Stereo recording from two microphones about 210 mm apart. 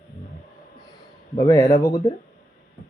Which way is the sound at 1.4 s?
15° left (ahead or behind).